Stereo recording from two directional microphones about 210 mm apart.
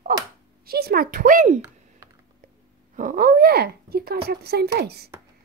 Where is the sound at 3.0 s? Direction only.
40° right (ahead or behind).